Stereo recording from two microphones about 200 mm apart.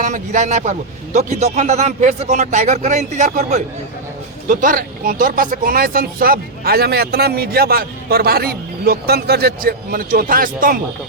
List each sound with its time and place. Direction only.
0.0 s a man's voice: 40° right (ahead or behind)